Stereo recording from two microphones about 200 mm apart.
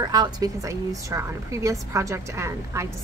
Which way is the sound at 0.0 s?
20° right (ahead or behind).